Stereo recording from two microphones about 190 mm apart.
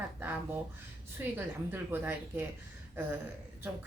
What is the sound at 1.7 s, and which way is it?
Speech, 10° right (ahead or behind).